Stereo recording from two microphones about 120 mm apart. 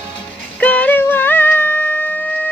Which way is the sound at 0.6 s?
10° left (ahead or behind).